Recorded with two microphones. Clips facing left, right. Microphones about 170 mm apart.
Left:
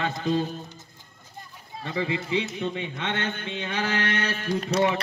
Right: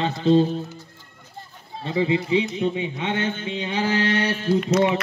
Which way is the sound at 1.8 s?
20° right (ahead or behind).